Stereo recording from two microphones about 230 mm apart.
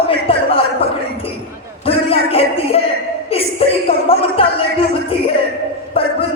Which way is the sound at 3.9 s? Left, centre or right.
Left.